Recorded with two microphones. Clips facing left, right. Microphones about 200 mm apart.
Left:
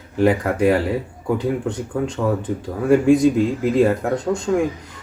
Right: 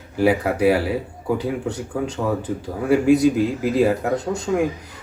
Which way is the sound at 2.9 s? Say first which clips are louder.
Left 2 dB; 10° right (ahead or behind).